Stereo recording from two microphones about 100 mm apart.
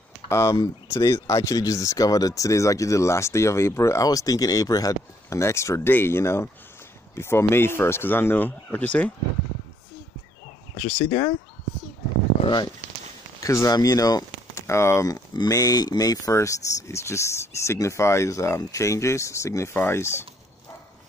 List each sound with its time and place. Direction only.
0.3 s speech: 30° left (ahead or behind); by 9.1 s 15° left (ahead or behind)
11.1 s speech: 55° left (ahead or behind)
13.4 s speech: 30° left (ahead or behind)
15.3 s speech: 40° left (ahead or behind)